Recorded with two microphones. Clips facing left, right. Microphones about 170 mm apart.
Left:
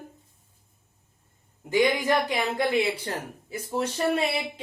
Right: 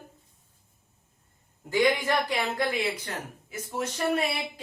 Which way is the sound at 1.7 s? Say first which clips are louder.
Left 1 dB; 20° left (ahead or behind).